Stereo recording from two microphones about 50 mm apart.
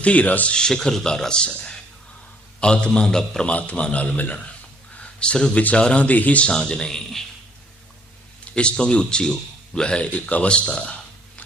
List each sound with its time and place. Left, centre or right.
0.0 s a man's voice: left
0.5 s a man's voice: centre
3.5 s a man's voice: left
6.5 s speech: centre
8.5 s speech: centre